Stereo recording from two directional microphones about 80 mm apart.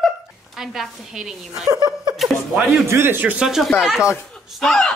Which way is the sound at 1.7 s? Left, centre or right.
Right.